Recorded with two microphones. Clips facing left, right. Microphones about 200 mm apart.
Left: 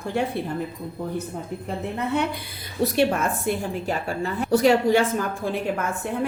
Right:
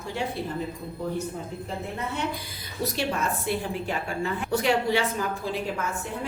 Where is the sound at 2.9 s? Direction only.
50° left (ahead or behind).